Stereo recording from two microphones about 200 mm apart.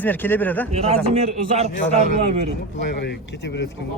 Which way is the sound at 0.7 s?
30° right (ahead or behind).